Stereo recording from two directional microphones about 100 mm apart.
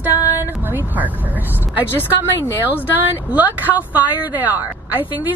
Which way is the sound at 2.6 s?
20° right (ahead or behind).